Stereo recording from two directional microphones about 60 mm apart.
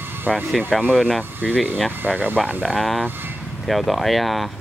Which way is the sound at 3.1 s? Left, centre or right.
Right.